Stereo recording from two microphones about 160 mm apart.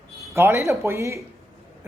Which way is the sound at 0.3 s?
15° right (ahead or behind).